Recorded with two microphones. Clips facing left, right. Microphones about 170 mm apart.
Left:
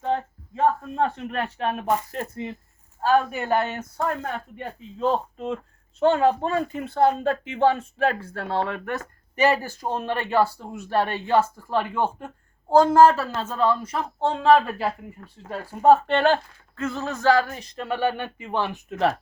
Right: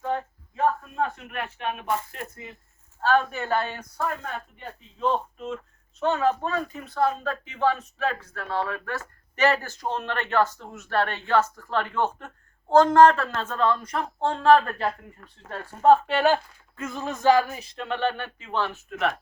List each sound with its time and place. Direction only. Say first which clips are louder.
0.0 s a sound: left 3 dB; 25° left (ahead or behind)
3.0 s speech: left 2 dB; 10° left (ahead or behind)
4.9 s speech: left 2 dB; 35° left (ahead or behind); by 16.1 s 5° left (ahead or behind)
16.1 s speech: left 2 dB; 10° right (ahead or behind); by 18.9 s 15° left (ahead or behind)